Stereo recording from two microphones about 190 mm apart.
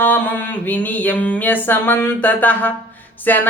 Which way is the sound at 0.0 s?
10° left (ahead or behind).